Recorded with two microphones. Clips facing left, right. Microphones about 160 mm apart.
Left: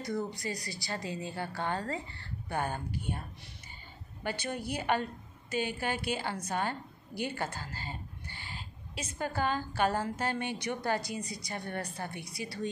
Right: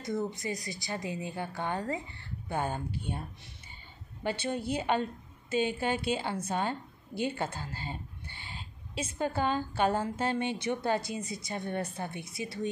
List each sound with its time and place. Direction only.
0.0 s a woman's voice: 20° right (ahead or behind)
4.2 s a woman's voice: 25° right (ahead or behind)